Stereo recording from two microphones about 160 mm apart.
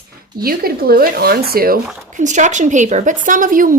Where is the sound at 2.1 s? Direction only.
50° right (ahead or behind).